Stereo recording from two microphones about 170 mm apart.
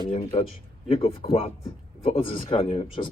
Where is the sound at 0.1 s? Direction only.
35° left (ahead or behind).